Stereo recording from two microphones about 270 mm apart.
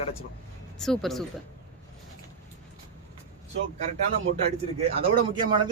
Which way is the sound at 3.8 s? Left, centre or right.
Right.